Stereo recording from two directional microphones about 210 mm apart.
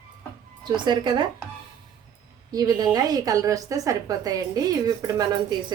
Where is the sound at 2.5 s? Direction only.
15° right (ahead or behind).